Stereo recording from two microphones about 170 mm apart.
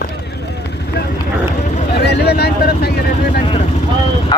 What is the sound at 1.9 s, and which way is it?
Speech, 70° left (ahead or behind).